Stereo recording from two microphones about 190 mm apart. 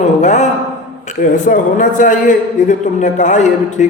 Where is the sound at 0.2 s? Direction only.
40° left (ahead or behind).